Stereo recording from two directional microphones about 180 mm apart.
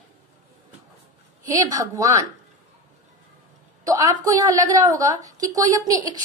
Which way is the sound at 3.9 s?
20° right (ahead or behind).